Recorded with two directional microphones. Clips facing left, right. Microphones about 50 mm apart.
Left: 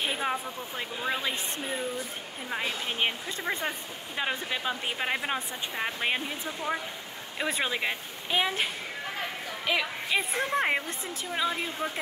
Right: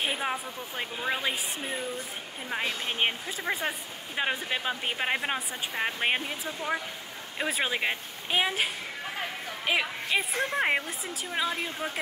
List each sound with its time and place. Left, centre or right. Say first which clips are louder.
0.0 s a sound: even; centre
1.3 s a woman's voice: even; centre
9.7 s a woman's voice: right 1 dB; right
10.0 s a woman's voice: even; centre